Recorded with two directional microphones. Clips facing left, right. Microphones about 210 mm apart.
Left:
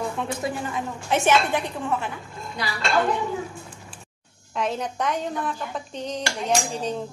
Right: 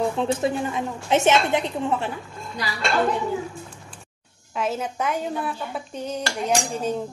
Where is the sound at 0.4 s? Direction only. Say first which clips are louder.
Right 4 dB; 25° right (ahead or behind).